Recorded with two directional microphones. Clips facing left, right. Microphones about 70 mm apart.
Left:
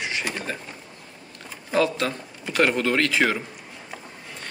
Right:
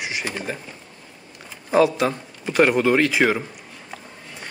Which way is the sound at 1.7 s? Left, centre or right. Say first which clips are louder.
Right 5 dB; centre.